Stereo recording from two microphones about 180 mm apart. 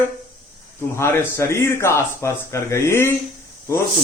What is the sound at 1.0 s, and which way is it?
Speech, 15° left (ahead or behind).